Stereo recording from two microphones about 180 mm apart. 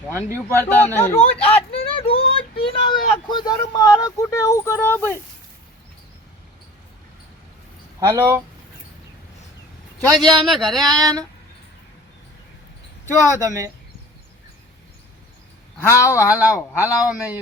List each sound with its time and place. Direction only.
0.5 s speech: 10° left (ahead or behind)
1.2 s speech: 30° left (ahead or behind); by 5.2 s 10° left (ahead or behind)
7.9 s speech: 15° right (ahead or behind)
10.2 s speech: centre (ahead or behind)
10.8 s a sound: 20° right (ahead or behind)
13.1 s speech: 15° right (ahead or behind)
15.8 s speech: 15° left (ahead or behind)
16.1 s speech: 10° right (ahead or behind)